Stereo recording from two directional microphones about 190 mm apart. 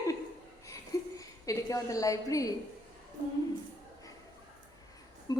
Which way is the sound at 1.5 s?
15° left (ahead or behind).